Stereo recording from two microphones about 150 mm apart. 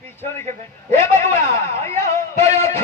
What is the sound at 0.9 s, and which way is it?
A man's voice, 20° left (ahead or behind).